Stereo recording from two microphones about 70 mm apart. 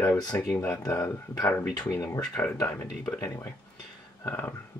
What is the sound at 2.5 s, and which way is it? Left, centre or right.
Speech, left.